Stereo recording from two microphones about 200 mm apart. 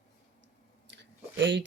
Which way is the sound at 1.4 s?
65° right (ahead or behind).